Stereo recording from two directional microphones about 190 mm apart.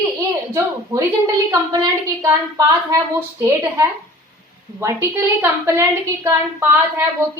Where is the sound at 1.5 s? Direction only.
20° right (ahead or behind).